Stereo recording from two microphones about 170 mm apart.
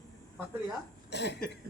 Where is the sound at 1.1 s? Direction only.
90° left.